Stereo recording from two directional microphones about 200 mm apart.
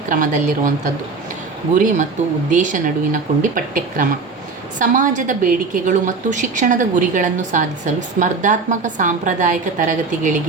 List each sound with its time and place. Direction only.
0.1 s a woman's voice: 40° right (ahead or behind)
1.7 s a woman's voice: 40° right (ahead or behind)